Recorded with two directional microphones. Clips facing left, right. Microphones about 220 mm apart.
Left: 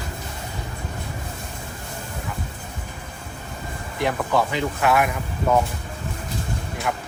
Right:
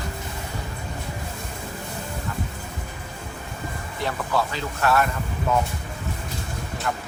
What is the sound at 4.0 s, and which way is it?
Speech, 15° left (ahead or behind).